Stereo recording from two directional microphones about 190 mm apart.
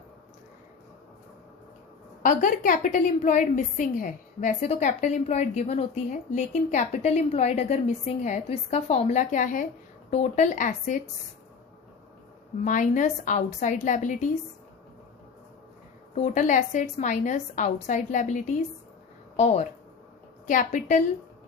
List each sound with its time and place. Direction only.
2.2 s a woman's voice: 40° left (ahead or behind)
12.6 s a woman's voice: 40° left (ahead or behind)
16.1 s a woman's voice: 35° left (ahead or behind)